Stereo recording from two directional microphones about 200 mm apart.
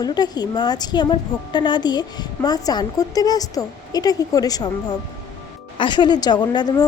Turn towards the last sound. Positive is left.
turn(degrees=20)  # may be behind; listen again after turning